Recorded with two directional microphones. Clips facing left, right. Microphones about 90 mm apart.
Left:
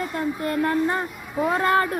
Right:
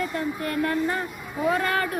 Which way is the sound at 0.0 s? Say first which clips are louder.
Left 2 dB; 25° left (ahead or behind).